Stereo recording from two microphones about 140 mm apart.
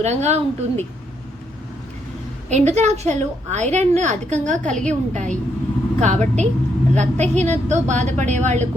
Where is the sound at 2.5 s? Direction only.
55° right (ahead or behind).